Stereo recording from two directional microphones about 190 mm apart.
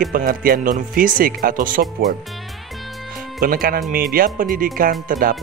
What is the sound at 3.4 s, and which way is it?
Speech, 50° right (ahead or behind).